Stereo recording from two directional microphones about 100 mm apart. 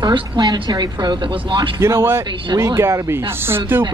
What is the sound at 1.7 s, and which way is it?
Speech, 25° right (ahead or behind).